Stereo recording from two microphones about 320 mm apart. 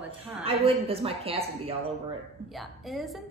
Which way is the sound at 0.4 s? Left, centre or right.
Centre.